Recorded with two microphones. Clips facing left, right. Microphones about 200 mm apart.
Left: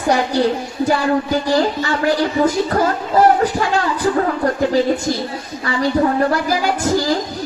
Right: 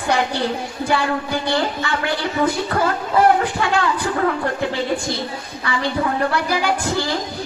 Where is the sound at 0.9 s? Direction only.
40° left (ahead or behind).